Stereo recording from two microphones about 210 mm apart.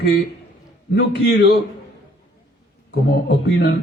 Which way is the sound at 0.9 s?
55° left (ahead or behind).